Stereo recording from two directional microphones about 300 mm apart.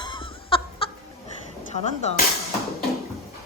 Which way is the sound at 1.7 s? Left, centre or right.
Left.